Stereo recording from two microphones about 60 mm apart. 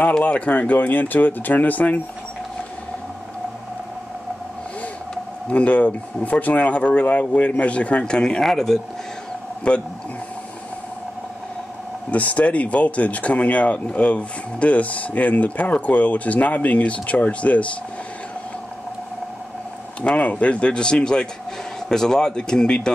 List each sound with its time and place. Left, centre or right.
0.2 s speech: left
5.1 s speech: left; by 8.7 s centre
9.7 s speech: centre
12.1 s speech: left
20.0 s speech: left